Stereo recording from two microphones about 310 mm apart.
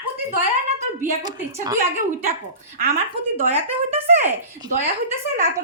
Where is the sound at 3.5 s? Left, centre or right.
Centre.